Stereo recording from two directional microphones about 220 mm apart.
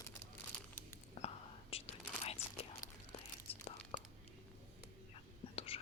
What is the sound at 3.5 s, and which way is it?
Tearing, 25° left (ahead or behind).